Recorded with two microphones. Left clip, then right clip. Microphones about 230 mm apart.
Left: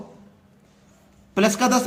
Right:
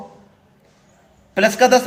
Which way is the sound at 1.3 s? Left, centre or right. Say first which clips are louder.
Right 6 dB; left.